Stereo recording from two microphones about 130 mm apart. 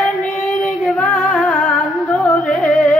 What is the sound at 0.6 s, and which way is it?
Music, 5° left (ahead or behind).